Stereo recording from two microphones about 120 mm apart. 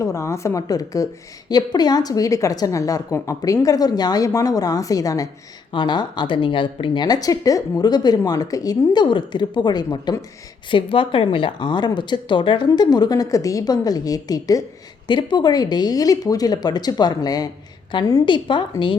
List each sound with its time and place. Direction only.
0.0 s a woman's voice: 25° left (ahead or behind)
10.7 s a woman's voice: 45° left (ahead or behind)